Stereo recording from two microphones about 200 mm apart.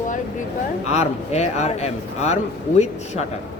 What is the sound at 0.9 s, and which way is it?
A man's voice, 35° left (ahead or behind).